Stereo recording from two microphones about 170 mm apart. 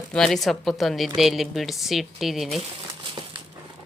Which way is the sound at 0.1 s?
5° left (ahead or behind).